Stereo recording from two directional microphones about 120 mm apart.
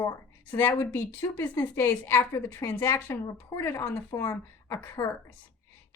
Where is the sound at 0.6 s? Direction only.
20° left (ahead or behind).